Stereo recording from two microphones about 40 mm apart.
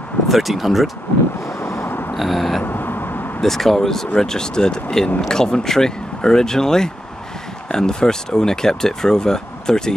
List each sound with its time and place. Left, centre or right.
0.3 s speech: centre
1.6 s snort: left
2.1 s speech: centre
2.6 s vehicle: left
3.3 s speech: centre